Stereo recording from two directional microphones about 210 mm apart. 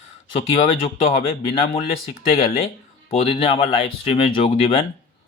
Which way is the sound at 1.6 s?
30° left (ahead or behind).